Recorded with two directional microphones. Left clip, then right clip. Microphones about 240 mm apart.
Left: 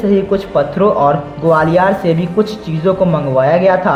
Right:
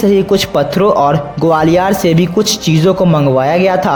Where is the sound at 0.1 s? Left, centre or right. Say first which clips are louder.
Right 2 dB; right.